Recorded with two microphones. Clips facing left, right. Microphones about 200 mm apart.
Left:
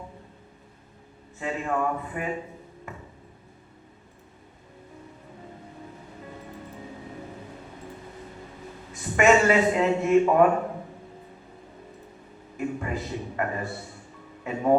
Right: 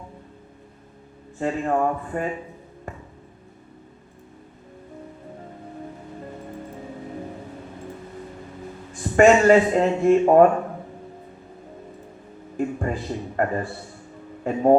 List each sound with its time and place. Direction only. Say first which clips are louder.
1.4 s speech: right 5 dB; 40° right (ahead or behind)
8.9 s a man's voice: right 5 dB; 35° right (ahead or behind)
12.5 s a man's voice: right 4 dB; 40° right (ahead or behind)